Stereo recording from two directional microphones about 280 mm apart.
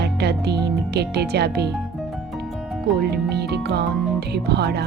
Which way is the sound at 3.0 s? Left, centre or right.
Right.